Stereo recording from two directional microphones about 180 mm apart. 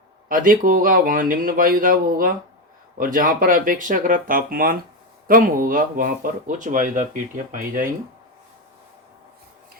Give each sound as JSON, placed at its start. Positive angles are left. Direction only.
{"t": 0.3, "sound": "speech", "side_deg": -50}